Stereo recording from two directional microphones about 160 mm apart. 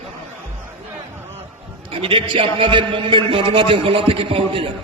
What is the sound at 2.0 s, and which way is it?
A man's voice, 35° right (ahead or behind).